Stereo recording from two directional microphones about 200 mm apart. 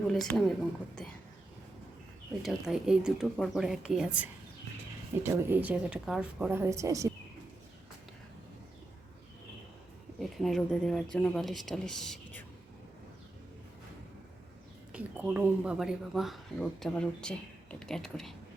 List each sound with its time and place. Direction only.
0.1 s speech: centre (ahead or behind)
2.4 s a woman's voice: centre (ahead or behind)
10.2 s speech: centre (ahead or behind)
14.9 s speech: 5° right (ahead or behind)